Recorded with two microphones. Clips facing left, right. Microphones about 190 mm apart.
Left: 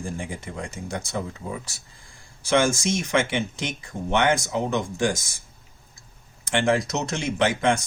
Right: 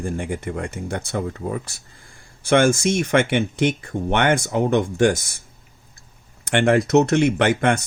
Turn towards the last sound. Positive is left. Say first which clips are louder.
# right 3 dB
turn(degrees=-60)  # may be behind; listen again after turning